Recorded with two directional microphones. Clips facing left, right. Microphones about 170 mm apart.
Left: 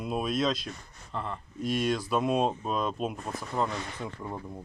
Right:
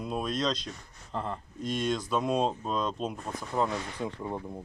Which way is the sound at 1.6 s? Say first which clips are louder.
Left 2 dB; 5° left (ahead or behind).